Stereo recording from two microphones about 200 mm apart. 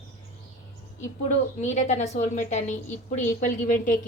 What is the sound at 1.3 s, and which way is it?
A woman's voice, 35° left (ahead or behind).